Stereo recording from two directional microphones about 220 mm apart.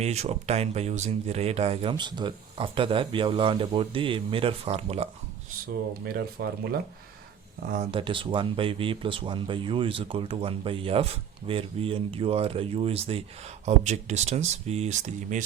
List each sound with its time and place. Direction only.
0.0 s speech: 30° right (ahead or behind)
6.1 s speech: 45° right (ahead or behind)
7.9 s speech: 25° right (ahead or behind)